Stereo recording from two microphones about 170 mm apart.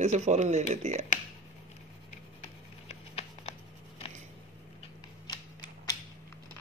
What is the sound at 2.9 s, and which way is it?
Patter, 35° left (ahead or behind).